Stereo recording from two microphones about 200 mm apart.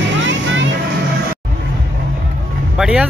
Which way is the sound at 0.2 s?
65° right (ahead or behind).